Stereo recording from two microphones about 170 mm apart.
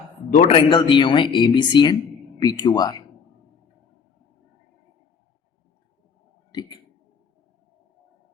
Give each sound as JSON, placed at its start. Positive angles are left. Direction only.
{"t": 0.4, "sound": "speech", "side_deg": 30}
{"t": 6.5, "sound": "speech", "side_deg": 25}